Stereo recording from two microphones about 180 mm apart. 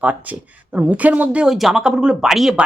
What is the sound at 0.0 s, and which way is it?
Speech, 10° right (ahead or behind).